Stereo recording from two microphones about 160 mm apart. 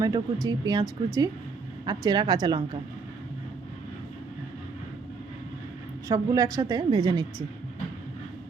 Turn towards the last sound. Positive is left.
turn(degrees=-25)  # may be behind; listen again after turning